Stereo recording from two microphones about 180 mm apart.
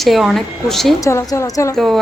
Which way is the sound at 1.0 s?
20° left (ahead or behind).